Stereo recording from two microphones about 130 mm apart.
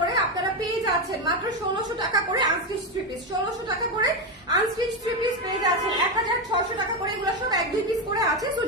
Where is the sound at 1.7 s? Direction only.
30° right (ahead or behind).